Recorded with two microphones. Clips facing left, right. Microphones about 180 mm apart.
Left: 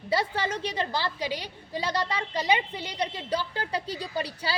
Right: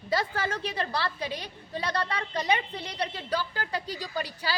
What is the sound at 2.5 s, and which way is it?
A woman's voice, 20° left (ahead or behind).